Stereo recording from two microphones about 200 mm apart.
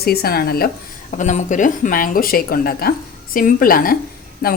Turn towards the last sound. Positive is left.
turn(degrees=45)  # may be behind; listen again after turning